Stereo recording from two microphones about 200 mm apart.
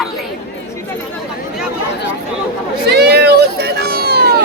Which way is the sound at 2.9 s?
55° right (ahead or behind).